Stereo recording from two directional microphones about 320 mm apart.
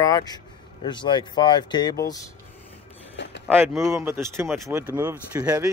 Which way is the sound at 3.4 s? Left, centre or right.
Centre.